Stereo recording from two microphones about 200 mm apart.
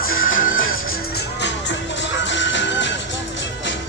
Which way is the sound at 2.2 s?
65° left (ahead or behind).